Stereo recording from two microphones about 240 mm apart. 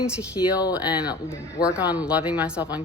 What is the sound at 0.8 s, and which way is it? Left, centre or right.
Speech, centre.